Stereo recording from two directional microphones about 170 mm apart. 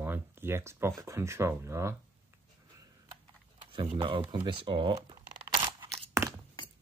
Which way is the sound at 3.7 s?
30° right (ahead or behind).